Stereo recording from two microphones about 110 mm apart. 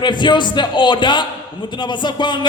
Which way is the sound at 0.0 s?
45° left (ahead or behind).